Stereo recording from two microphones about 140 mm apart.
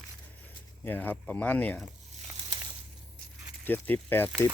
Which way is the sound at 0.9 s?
15° left (ahead or behind).